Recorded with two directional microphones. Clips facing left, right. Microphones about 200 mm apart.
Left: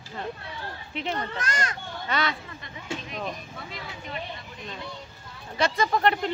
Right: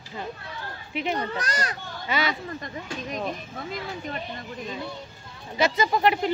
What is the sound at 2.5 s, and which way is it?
Speech, 45° right (ahead or behind).